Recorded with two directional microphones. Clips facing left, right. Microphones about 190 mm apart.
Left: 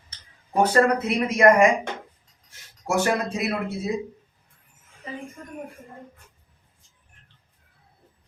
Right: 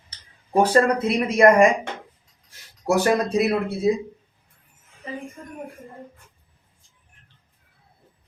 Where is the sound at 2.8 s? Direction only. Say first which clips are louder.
Right 4 dB; 35° right (ahead or behind).